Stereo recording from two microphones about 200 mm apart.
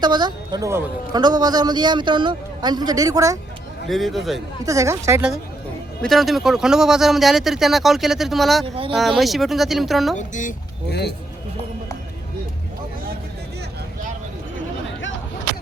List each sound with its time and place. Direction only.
0.0 s a woman's voice: 20° right (ahead or behind)
3.8 s speech: centre (ahead or behind)
4.6 s speech: 15° right (ahead or behind)
6.0 s speech: centre (ahead or behind)
8.6 s a woman's voice: 25° right (ahead or behind)
8.9 s speech: centre (ahead or behind)
10.2 s speech: 40° left (ahead or behind)
10.8 s speech: 55° left (ahead or behind)